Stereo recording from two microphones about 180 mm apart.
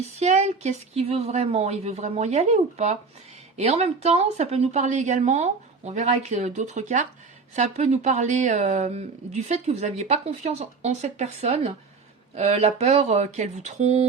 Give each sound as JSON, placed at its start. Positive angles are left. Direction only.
{"t": 0.2, "sound": "speech", "side_deg": -40}